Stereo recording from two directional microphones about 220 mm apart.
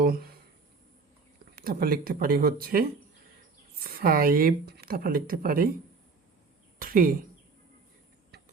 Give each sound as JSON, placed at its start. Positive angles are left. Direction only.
{"t": 0.0, "sound": "a sound", "side_deg": -40}
{"t": 1.5, "sound": "speech", "side_deg": -40}
{"t": 3.8, "sound": "speech", "side_deg": -40}
{"t": 6.7, "sound": "speech", "side_deg": -40}